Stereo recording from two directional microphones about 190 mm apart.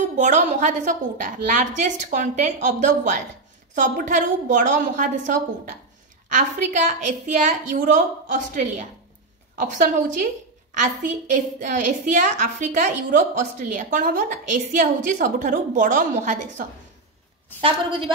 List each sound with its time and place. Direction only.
0.2 s a woman's voice: 40° right (ahead or behind)
17.6 s a woman's voice: 30° right (ahead or behind)